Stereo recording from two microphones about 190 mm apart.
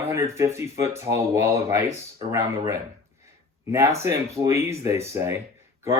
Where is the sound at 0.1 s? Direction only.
15° right (ahead or behind).